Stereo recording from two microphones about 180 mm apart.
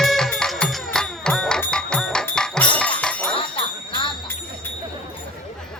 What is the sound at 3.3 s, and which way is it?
Music, 30° left (ahead or behind).